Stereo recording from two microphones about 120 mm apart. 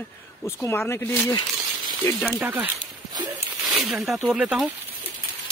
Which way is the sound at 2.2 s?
Centre (ahead or behind).